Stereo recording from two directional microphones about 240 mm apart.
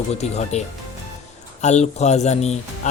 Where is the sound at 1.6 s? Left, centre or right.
Left.